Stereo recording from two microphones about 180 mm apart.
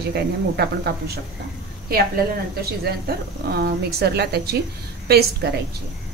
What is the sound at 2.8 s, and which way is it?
Speech, 60° right (ahead or behind).